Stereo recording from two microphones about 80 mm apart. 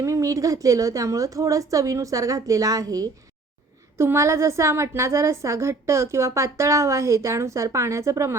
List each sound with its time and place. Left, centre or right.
0.0 s a woman's voice: right
3.9 s a woman's voice: right